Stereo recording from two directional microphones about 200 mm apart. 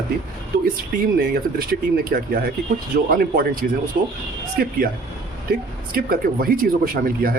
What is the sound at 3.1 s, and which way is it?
Speech, 45° right (ahead or behind).